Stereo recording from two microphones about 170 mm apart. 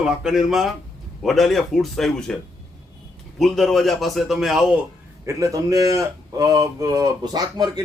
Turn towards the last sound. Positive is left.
turn(degrees=-25)  # may be behind; listen again after turning